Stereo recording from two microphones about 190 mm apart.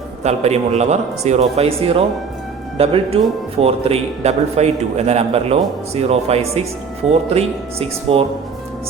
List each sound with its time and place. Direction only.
0.2 s a man's voice: 35° right (ahead or behind)